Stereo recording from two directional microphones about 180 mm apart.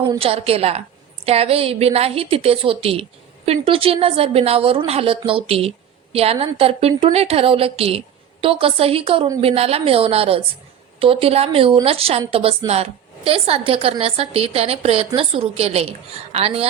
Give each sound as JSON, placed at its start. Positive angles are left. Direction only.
{"t": 0.0, "sound": "a woman's voice", "side_deg": -25}